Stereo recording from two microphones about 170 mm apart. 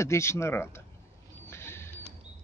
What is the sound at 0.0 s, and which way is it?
Speech, 15° left (ahead or behind).